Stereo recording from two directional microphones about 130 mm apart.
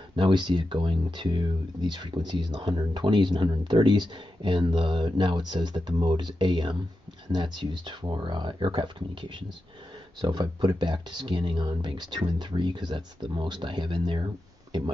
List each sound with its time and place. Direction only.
0.1 s speech: 35° right (ahead or behind)